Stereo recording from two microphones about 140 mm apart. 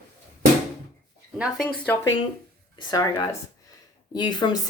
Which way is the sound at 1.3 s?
5° right (ahead or behind).